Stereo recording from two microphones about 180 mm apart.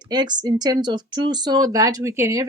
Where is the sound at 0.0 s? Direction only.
25° right (ahead or behind).